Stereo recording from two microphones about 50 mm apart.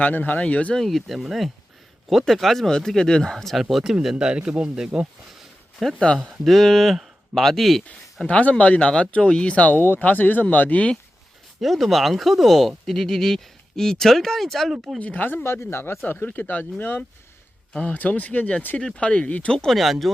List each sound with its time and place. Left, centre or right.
0.0 s speech: left
0.7 s speech: centre
3.6 s speech: centre
5.8 s speech: centre
8.3 s speech: left
9.7 s speech: left
10.0 s speech: left
11.6 s speech: centre
14.9 s speech: left
15.4 s speech: left
19.5 s speech: centre
19.7 s speech: centre